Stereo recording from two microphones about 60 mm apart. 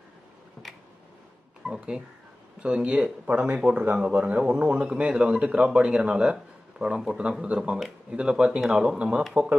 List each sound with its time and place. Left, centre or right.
1.7 s a man's voice: centre